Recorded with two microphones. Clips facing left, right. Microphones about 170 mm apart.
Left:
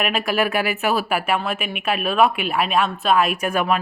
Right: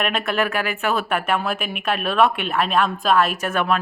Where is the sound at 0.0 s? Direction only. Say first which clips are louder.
Left 1 dB; 10° left (ahead or behind).